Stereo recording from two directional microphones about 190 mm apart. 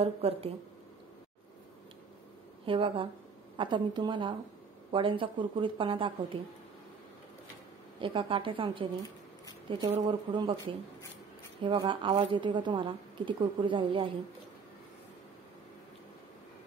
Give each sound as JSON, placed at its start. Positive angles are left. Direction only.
{"t": 0.0, "sound": "speech", "side_deg": -30}
{"t": 2.6, "sound": "a woman's voice", "side_deg": -25}
{"t": 8.0, "sound": "a woman's voice", "side_deg": -25}
{"t": 11.6, "sound": "a woman's voice", "side_deg": -25}